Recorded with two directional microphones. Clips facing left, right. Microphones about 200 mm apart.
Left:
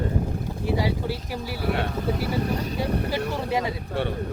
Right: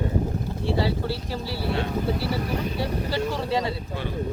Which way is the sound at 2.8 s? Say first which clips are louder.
Left 1 dB; 15° left (ahead or behind).